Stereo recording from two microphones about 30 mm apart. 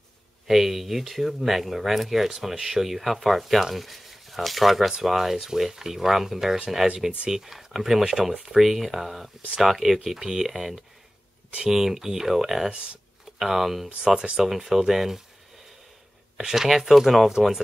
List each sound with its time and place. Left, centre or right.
0.5 s speech: centre
12.6 s speech: right
13.4 s speech: centre
13.8 s speech: right
14.4 s speech: centre
16.3 s speech: centre
17.4 s speech: centre